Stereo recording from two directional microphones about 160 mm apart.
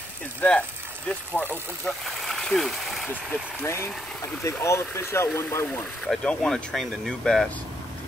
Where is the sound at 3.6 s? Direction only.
15° left (ahead or behind).